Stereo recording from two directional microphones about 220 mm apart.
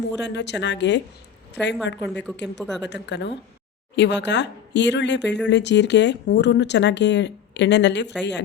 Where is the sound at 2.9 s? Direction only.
50° left (ahead or behind).